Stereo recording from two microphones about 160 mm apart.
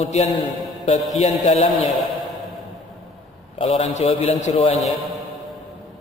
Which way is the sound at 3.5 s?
35° left (ahead or behind).